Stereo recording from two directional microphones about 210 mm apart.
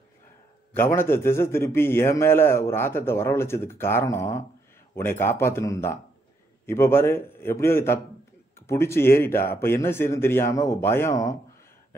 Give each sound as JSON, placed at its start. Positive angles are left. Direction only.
{"t": 0.7, "sound": "a man's voice", "side_deg": 10}